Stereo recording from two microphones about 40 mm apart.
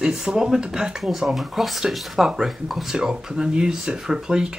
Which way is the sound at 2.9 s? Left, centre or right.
Centre.